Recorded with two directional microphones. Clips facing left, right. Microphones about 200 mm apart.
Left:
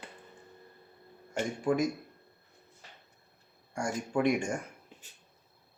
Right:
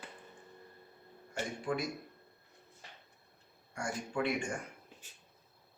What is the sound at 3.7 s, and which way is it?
Speech, 45° left (ahead or behind).